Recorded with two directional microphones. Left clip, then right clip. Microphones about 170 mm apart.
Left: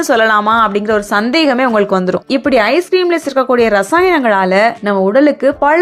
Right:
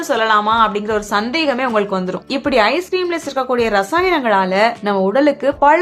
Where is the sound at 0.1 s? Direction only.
40° left (ahead or behind).